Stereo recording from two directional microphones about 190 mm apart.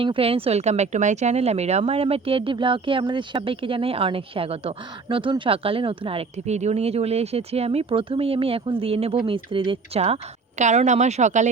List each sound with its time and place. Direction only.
0.0 s a woman's voice: 30° right (ahead or behind)